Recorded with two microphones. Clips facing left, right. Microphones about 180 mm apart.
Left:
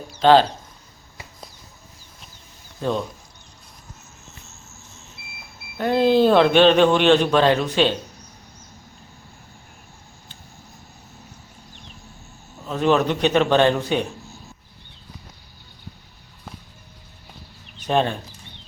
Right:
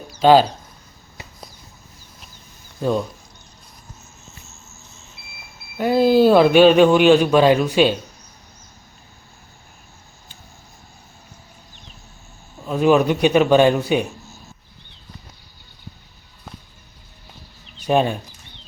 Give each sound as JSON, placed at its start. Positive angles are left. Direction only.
{"t": 0.2, "sound": "a man's voice", "side_deg": -10}
{"t": 2.8, "sound": "a man's voice", "side_deg": -5}
{"t": 5.7, "sound": "a man's voice", "side_deg": -10}
{"t": 12.6, "sound": "a man's voice", "side_deg": -10}
{"t": 17.7, "sound": "speech", "side_deg": -10}